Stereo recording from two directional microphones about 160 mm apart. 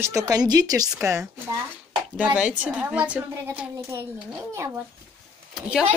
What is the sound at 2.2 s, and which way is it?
Speech, 5° right (ahead or behind).